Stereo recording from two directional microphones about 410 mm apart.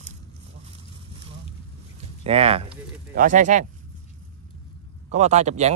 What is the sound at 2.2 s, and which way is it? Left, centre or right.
Speech, centre.